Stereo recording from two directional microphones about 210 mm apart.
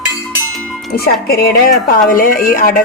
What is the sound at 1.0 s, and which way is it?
Speech, 45° left (ahead or behind).